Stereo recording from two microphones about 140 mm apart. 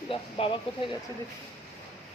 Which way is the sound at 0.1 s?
40° left (ahead or behind).